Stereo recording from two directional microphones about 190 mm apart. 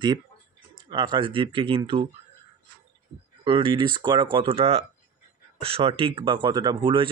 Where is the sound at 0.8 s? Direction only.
25° right (ahead or behind).